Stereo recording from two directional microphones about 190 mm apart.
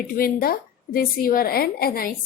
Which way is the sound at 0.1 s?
50° left (ahead or behind).